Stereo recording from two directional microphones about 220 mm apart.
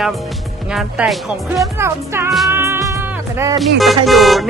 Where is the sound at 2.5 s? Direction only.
10° right (ahead or behind).